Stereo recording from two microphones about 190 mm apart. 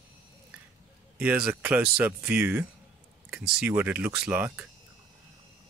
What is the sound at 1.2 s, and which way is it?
Speech, 5° right (ahead or behind).